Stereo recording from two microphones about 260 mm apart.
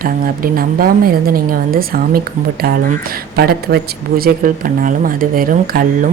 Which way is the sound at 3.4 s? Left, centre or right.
Right.